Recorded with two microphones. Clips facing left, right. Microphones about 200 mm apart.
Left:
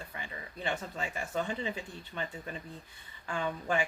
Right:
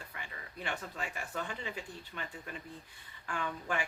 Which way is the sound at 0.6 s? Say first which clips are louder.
Left 4 dB; 25° left (ahead or behind).